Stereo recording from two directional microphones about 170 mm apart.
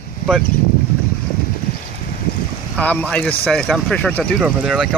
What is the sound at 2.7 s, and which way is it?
Speech, 5° left (ahead or behind).